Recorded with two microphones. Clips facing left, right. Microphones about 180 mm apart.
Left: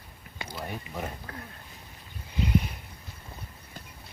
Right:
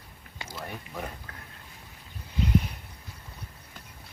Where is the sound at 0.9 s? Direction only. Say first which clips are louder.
Left 1 dB; centre (ahead or behind).